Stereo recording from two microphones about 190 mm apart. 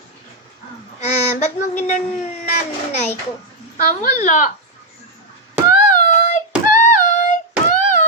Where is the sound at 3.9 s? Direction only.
40° left (ahead or behind).